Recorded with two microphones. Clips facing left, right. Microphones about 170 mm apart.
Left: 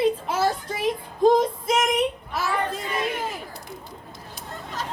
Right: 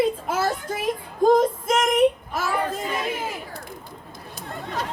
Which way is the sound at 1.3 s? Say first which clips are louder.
Right 2 dB; 50° right (ahead or behind).